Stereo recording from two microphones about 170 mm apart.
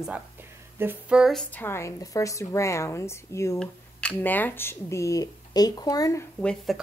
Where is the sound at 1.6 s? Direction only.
15° left (ahead or behind).